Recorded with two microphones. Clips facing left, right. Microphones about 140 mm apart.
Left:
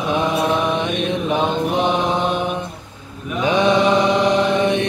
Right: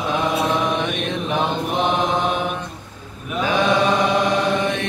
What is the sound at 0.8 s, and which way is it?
Mantra, 15° left (ahead or behind).